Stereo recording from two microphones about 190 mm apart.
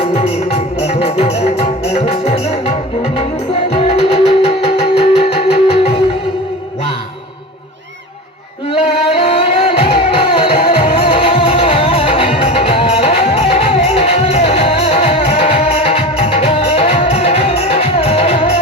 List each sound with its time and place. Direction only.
0.0 s music: 30° left (ahead or behind)
8.7 s music: 30° left (ahead or behind)